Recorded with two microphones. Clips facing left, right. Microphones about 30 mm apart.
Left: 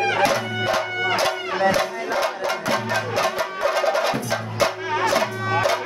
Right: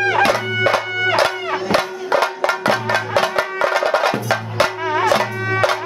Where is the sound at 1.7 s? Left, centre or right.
Right.